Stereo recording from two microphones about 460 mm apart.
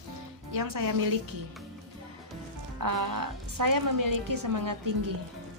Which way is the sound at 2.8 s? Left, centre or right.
Right.